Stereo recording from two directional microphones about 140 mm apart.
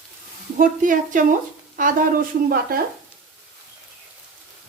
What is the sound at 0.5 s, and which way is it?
Speech, 75° right (ahead or behind).